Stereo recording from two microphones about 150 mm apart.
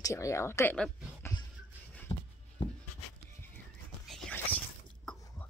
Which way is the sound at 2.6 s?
40° left (ahead or behind).